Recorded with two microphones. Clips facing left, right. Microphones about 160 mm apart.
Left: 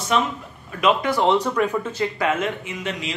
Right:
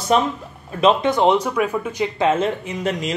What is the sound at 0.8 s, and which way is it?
Speech, 25° right (ahead or behind).